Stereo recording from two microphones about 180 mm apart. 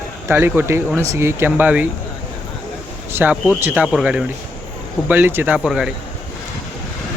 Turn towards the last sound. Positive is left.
turn(degrees=-5)  # may be behind; listen again after turning